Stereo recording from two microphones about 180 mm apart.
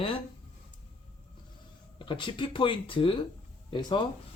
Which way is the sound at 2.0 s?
30° left (ahead or behind).